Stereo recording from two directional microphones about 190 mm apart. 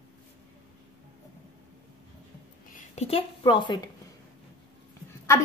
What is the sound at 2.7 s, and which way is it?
A woman's voice, 40° left (ahead or behind).